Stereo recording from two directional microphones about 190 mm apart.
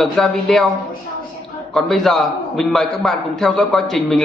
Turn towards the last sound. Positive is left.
turn(degrees=0)  # may be behind; listen again after turning